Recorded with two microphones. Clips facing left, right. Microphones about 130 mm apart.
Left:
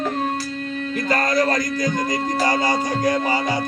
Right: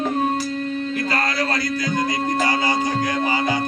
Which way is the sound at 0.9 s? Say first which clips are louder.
Left 7 dB; 45° left (ahead or behind).